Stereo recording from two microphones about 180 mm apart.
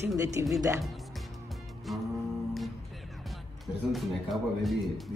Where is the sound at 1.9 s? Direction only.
Centre (ahead or behind).